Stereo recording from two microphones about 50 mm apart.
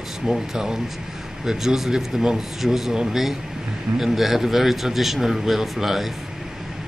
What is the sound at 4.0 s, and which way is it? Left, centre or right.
A man's voice, centre.